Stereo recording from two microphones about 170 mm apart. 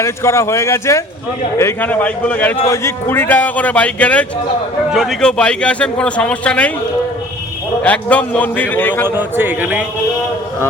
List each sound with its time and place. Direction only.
0.0 s a man's voice: 15° left (ahead or behind)
7.8 s speech: 10° left (ahead or behind)
9.0 s a man's voice: 10° right (ahead or behind)